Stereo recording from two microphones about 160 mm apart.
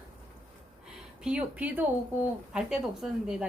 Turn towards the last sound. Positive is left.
turn(degrees=-5)  # may be behind; listen again after turning